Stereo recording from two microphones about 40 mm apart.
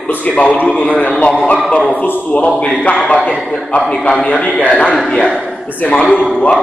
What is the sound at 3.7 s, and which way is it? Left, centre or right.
Speech, left.